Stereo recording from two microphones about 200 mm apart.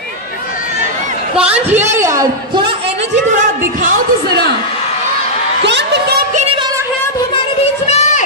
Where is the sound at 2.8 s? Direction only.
40° right (ahead or behind).